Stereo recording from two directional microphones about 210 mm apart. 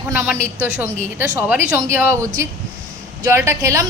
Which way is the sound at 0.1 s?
10° right (ahead or behind).